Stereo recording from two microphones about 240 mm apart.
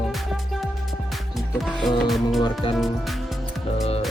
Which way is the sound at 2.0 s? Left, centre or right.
Centre.